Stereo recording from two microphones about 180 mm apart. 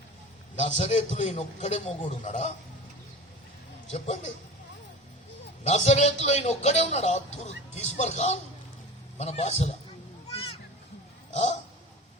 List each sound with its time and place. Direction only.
0.5 s a man's voice: 40° left (ahead or behind)
3.8 s a man's voice: 35° left (ahead or behind)
5.6 s a man's voice: 40° left (ahead or behind)
10.3 s a sound: 30° left (ahead or behind)